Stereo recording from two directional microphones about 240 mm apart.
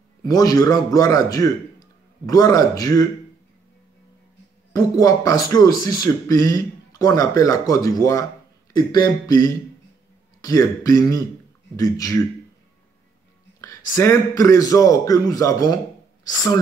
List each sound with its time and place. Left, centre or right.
0.2 s speech: centre
4.7 s speech: centre
13.6 s speech: centre